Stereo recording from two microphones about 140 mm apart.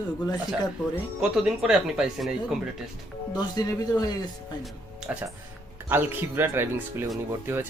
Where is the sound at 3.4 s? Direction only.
30° left (ahead or behind).